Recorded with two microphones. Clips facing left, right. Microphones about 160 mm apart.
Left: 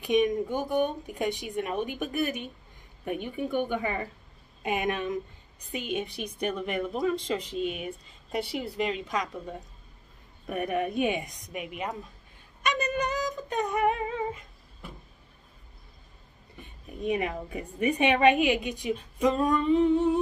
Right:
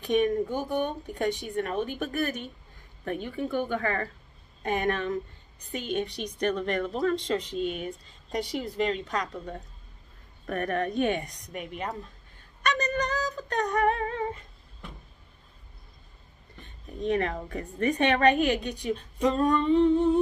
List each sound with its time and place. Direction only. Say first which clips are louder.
0.0 s a woman's voice: even; 15° left (ahead or behind)
14.8 s vehicle: even; 5° left (ahead or behind)
16.5 s a woman's voice: right 2 dB; 10° left (ahead or behind)